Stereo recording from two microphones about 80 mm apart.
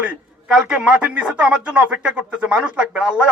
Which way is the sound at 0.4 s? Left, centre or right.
Centre.